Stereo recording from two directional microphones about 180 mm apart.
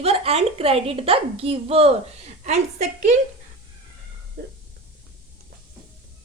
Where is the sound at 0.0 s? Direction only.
35° right (ahead or behind).